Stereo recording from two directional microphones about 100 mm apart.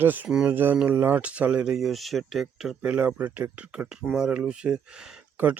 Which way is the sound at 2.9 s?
15° right (ahead or behind).